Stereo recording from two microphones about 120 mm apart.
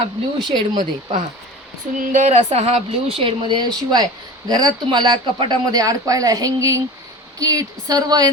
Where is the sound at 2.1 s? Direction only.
75° right (ahead or behind).